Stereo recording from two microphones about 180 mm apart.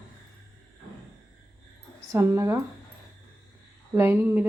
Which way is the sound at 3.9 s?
10° right (ahead or behind).